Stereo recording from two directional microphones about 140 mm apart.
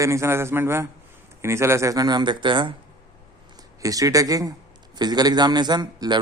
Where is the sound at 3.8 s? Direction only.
25° right (ahead or behind).